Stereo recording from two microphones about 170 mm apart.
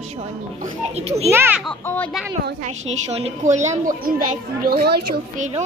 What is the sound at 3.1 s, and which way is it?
A child's voice, 35° right (ahead or behind).